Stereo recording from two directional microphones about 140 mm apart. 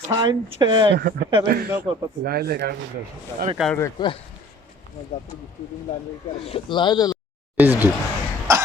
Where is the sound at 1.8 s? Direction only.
90° right.